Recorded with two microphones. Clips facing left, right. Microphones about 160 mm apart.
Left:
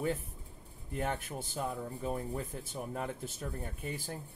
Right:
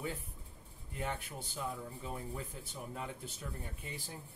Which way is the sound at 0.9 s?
45° left (ahead or behind).